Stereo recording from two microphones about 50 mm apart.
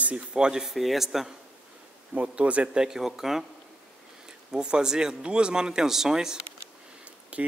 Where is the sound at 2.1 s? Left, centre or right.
Right.